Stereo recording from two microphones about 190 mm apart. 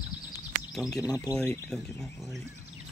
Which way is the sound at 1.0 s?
20° left (ahead or behind).